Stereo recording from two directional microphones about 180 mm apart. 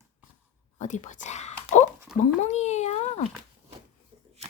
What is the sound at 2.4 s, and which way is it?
Speech, 40° left (ahead or behind).